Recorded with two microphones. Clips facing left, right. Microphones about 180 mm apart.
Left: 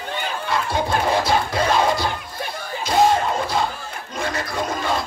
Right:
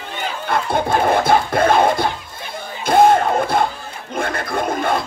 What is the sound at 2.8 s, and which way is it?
Music, 55° right (ahead or behind).